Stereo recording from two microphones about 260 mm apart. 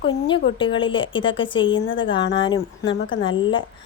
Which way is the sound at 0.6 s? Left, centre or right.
Centre.